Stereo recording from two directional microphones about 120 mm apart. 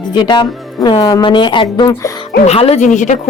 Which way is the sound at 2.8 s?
90° left.